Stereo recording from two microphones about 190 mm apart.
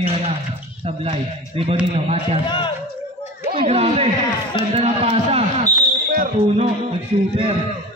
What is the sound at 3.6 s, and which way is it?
A man's voice, 35° right (ahead or behind).